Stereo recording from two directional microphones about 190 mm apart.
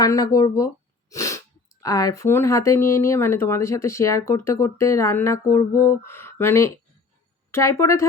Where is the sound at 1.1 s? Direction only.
15° left (ahead or behind).